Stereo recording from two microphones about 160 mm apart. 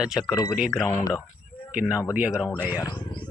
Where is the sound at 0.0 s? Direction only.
5° right (ahead or behind).